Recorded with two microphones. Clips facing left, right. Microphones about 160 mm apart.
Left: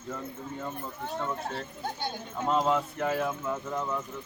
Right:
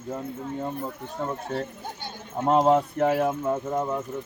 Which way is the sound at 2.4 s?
50° right (ahead or behind).